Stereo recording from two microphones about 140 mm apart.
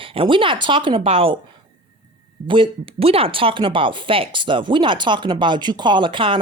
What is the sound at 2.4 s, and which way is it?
Speech, 35° right (ahead or behind).